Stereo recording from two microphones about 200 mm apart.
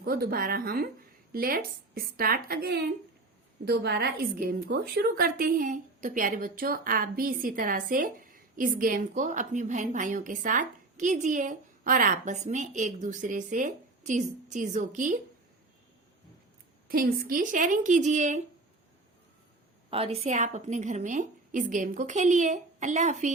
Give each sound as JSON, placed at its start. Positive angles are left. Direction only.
{"t": 0.0, "sound": "a woman's voice", "side_deg": -50}
{"t": 16.9, "sound": "a woman's voice", "side_deg": -45}
{"t": 19.9, "sound": "a woman's voice", "side_deg": -30}